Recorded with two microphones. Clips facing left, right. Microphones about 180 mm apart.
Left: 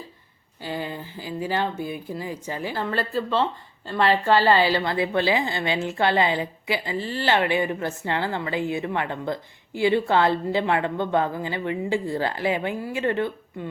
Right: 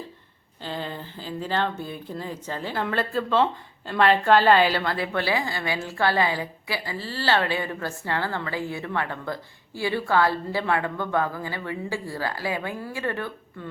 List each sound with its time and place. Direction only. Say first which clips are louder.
0.6 s a woman's voice: left 2 dB; 10° left (ahead or behind)
4.7 s a woman's voice: left 3 dB; 20° left (ahead or behind)